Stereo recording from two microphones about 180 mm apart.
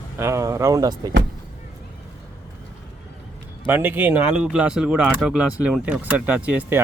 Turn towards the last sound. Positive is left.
turn(degrees=-10)  # may be behind; listen again after turning